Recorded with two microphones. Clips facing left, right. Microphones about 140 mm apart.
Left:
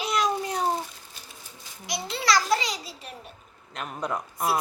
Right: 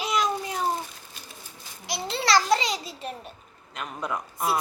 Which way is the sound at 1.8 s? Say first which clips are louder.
Left 1 dB; 30° right (ahead or behind).